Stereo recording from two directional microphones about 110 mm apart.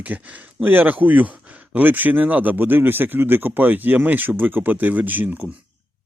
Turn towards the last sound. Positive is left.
turn(degrees=-15)  # may be behind; listen again after turning